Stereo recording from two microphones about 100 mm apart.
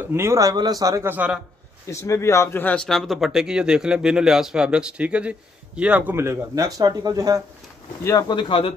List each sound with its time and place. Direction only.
0.0 s speech: 25° right (ahead or behind)
0.4 s speech: 40° right (ahead or behind)
1.0 s speech: 15° right (ahead or behind)
1.9 s speech: 30° left (ahead or behind)
2.7 s speech: 5° left (ahead or behind); by 6.1 s 15° right (ahead or behind)
6.1 s speech: 25° right (ahead or behind)
8.0 s speech: 30° left (ahead or behind)
8.3 s speech: 50° left (ahead or behind)